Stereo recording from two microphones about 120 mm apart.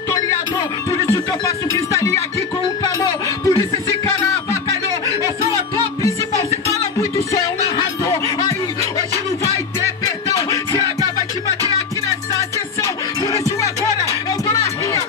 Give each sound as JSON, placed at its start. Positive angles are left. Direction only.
{"t": 0.6, "sound": "music", "side_deg": 25}
{"t": 7.7, "sound": "music", "side_deg": 30}